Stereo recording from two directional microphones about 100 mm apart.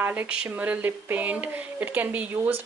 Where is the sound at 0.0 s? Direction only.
15° right (ahead or behind).